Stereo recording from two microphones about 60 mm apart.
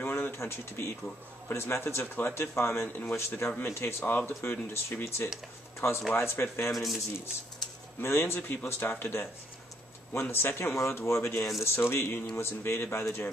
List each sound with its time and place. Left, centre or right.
0.0 s pigeon: left
1.5 s a man's voice: left
6.7 s speech: centre
8.0 s a man's voice: left